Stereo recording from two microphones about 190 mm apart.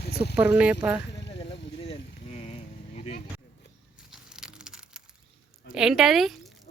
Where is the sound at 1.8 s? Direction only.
30° left (ahead or behind).